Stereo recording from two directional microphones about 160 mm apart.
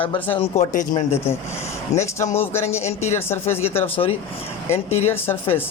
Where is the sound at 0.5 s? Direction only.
50° left (ahead or behind).